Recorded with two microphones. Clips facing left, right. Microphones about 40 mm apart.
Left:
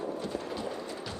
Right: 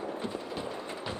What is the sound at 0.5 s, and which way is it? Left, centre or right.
Music, centre.